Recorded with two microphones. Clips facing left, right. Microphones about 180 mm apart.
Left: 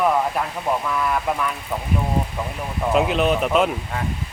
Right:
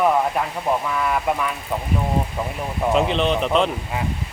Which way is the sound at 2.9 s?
5° left (ahead or behind).